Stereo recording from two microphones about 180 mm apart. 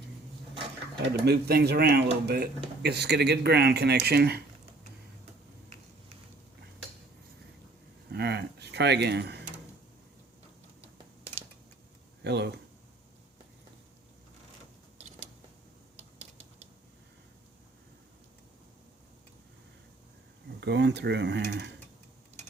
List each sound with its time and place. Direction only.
1.2 s speech: 65° right (ahead or behind)
8.1 s a sound: 65° right (ahead or behind)
12.2 s speech: 70° right (ahead or behind)
16.0 s typing: 35° right (ahead or behind)
20.6 s speech: 70° right (ahead or behind)